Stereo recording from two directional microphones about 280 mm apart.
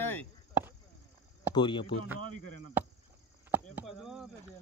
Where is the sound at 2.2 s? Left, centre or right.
Left.